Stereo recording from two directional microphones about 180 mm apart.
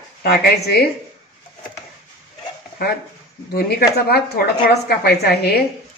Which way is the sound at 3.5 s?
60° left (ahead or behind).